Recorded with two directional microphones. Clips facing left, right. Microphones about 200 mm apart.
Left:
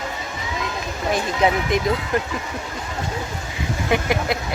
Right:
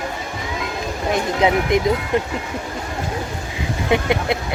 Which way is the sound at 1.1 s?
20° right (ahead or behind).